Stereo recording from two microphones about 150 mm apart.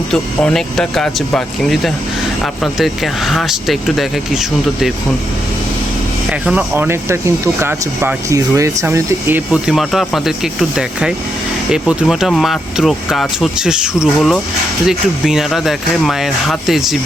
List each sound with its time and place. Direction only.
0.1 s speech: 5° left (ahead or behind)
6.4 s speech: 10° right (ahead or behind)
9.5 s speech: 5° right (ahead or behind)